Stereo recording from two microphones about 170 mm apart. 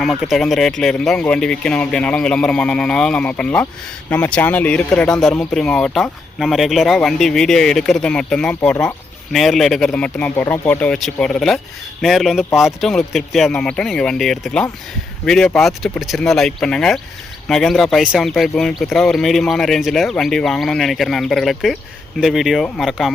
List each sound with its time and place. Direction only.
0.0 s speech: centre (ahead or behind)